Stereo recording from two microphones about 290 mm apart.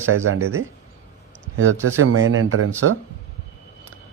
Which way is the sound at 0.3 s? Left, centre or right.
Right.